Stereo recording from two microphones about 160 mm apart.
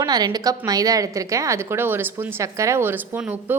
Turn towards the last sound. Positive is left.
turn(degrees=-10)  # may be behind; listen again after turning